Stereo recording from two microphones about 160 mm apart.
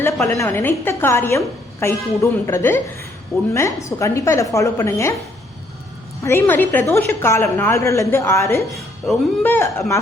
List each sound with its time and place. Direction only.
0.0 s a woman's voice: 20° left (ahead or behind)
6.2 s a woman's voice: 15° left (ahead or behind)
9.0 s speech: centre (ahead or behind)
9.4 s a woman's voice: 10° left (ahead or behind)